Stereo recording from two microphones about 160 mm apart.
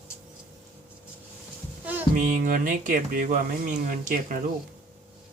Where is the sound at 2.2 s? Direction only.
55° right (ahead or behind).